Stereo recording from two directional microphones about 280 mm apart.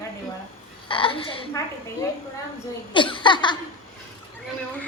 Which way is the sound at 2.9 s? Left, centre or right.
Centre.